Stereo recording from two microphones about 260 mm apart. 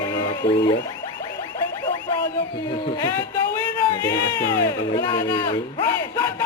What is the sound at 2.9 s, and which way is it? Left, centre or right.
A man's voice, centre.